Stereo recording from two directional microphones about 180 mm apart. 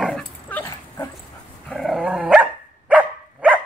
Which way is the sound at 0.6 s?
15° left (ahead or behind).